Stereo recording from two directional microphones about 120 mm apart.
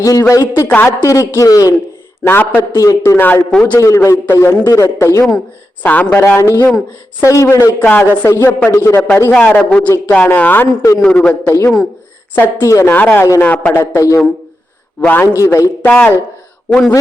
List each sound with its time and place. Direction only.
0.0 s a man's voice: 25° left (ahead or behind)
2.2 s a man's voice: 15° left (ahead or behind)
2.7 s a man's voice: 30° left (ahead or behind)
3.5 s a man's voice: 5° left (ahead or behind)
3.8 s a man's voice: 25° left (ahead or behind)
4.6 s a man's voice: 30° left (ahead or behind)
5.8 s a man's voice: 15° left (ahead or behind)
13.9 s a man's voice: 25° left (ahead or behind)
15.0 s a man's voice: 10° left (ahead or behind)